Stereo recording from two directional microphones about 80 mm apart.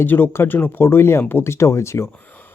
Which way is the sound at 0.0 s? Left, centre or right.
Left.